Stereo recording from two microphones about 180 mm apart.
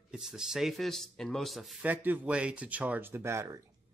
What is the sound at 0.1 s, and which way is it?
Speech, 5° right (ahead or behind).